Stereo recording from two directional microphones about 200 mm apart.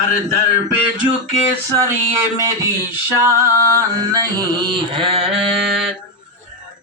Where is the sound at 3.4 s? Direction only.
15° right (ahead or behind).